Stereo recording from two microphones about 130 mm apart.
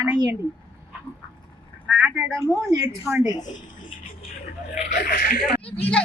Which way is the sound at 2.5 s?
25° right (ahead or behind).